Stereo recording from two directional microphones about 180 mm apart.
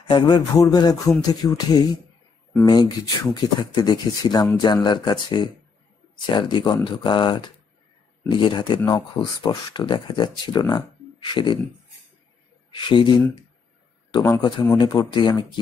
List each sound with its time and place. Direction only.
0.1 s speech: 25° left (ahead or behind)
12.7 s speech: 25° left (ahead or behind)
14.2 s speech: 20° left (ahead or behind)